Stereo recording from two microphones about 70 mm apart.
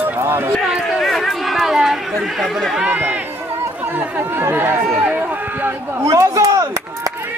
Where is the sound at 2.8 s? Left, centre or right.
Right.